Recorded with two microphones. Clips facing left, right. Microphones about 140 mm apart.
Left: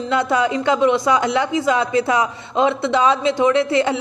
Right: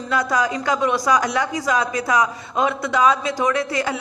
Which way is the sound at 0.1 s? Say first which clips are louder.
Left 2 dB; 25° left (ahead or behind).